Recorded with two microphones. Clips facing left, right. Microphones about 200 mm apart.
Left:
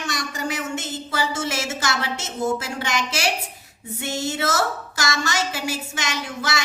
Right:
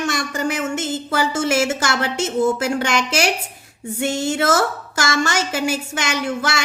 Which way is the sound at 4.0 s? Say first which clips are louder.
Right 6 dB; 50° right (ahead or behind).